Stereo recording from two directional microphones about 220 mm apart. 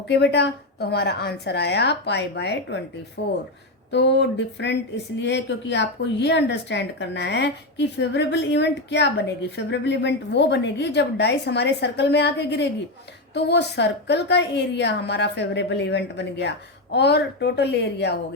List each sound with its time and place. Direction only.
0.1 s speech: 50° left (ahead or behind)
3.9 s speech: 50° left (ahead or behind)